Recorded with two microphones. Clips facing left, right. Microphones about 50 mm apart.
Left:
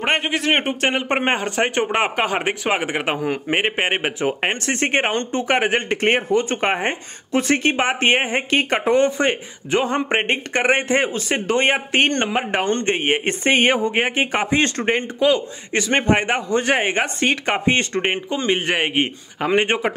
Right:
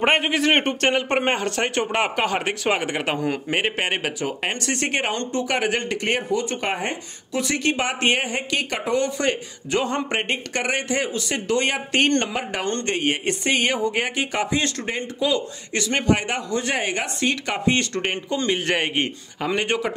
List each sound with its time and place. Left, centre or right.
0.0 s speech: centre
19.4 s speech: left